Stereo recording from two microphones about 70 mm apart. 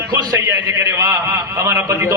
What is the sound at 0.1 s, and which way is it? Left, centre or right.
A man's voice, right.